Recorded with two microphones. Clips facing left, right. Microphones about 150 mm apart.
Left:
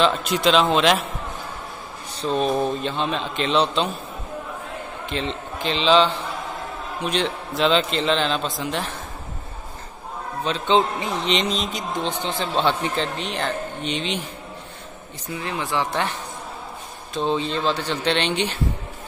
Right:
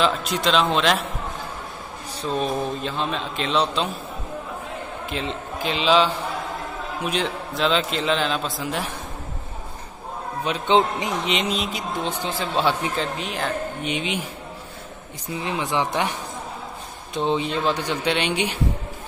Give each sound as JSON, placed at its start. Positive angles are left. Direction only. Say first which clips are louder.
{"t": 0.0, "sound": "a man's voice", "louder": "left 2 dB", "side_deg": 0}
{"t": 2.3, "sound": "a man's voice", "louder": "left 3 dB", "side_deg": 0}
{"t": 5.1, "sound": "a man's voice", "louder": "left 2 dB", "side_deg": -5}
{"t": 10.4, "sound": "a man's voice", "louder": "even", "side_deg": -15}
{"t": 15.3, "sound": "a man's voice", "louder": "right 1 dB", "side_deg": -20}